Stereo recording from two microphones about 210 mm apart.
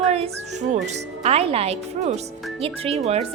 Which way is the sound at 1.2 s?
30° right (ahead or behind).